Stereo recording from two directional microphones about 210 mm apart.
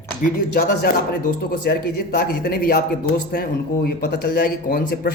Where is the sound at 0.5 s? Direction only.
45° left (ahead or behind).